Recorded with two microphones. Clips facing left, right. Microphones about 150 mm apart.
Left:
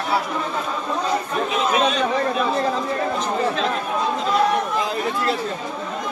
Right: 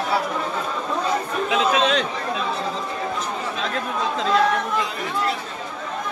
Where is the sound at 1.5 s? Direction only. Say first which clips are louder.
Right 1 dB; 90° right.